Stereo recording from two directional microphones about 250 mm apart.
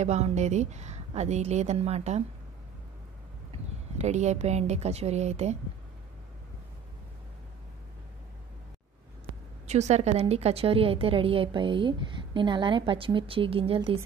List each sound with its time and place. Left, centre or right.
0.0 s a woman's voice: right
4.0 s a woman's voice: right
9.7 s a woman's voice: right